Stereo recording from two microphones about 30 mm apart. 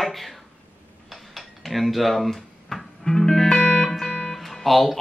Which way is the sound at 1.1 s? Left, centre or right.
Centre.